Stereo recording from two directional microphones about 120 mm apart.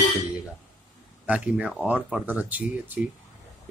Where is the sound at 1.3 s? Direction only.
10° right (ahead or behind).